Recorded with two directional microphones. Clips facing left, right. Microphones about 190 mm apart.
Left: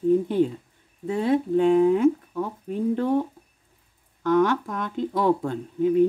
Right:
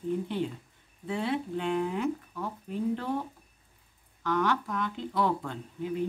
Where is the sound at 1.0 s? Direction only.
45° left (ahead or behind).